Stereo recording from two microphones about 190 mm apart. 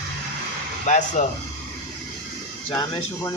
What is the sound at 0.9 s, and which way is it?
Speech, 40° left (ahead or behind).